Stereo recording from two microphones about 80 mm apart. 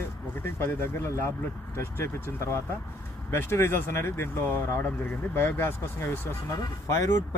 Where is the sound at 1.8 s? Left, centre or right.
Left.